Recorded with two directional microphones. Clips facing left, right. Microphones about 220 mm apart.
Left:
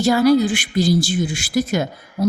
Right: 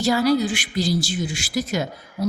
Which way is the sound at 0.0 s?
50° left (ahead or behind).